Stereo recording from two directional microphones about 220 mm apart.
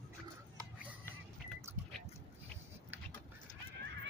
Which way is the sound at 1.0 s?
5° left (ahead or behind).